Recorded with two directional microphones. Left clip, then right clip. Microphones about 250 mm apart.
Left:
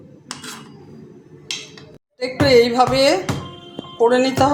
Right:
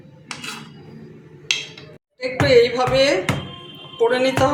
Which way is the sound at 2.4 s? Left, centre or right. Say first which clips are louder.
Left 2 dB; left.